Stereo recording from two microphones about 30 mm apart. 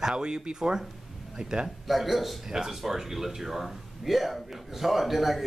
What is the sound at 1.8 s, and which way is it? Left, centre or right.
Speech, centre.